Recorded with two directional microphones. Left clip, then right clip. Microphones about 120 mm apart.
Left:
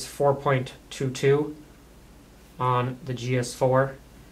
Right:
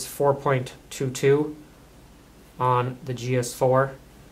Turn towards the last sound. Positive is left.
turn(degrees=-25)  # may be behind; listen again after turning